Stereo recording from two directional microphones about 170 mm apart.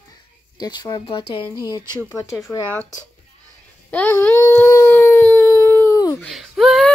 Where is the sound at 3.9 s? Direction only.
10° left (ahead or behind).